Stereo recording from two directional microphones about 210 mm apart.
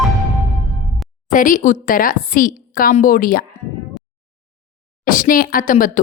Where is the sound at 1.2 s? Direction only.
40° left (ahead or behind).